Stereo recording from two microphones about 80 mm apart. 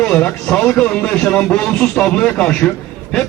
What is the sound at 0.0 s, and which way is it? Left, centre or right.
A man's voice, centre.